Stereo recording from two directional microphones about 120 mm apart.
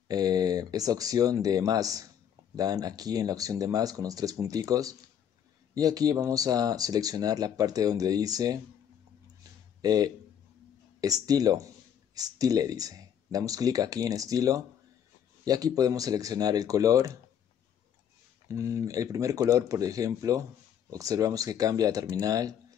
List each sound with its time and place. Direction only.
0.1 s speech: 30° right (ahead or behind)
9.8 s speech: 35° right (ahead or behind)
18.5 s speech: 25° right (ahead or behind)